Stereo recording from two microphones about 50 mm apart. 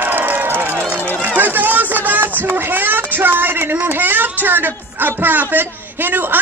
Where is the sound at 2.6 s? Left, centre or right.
Right.